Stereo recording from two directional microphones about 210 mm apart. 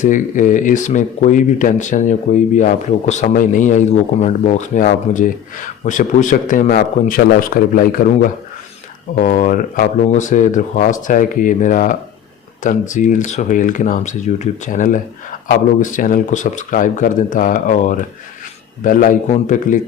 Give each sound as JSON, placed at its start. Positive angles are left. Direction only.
{"t": 0.0, "sound": "speech", "side_deg": 40}